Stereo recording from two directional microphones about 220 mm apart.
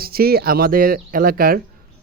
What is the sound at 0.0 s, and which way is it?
Speech, 45° right (ahead or behind).